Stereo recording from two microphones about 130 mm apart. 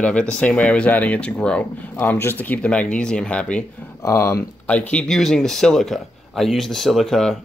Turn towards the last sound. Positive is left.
turn(degrees=5)  # may be behind; listen again after turning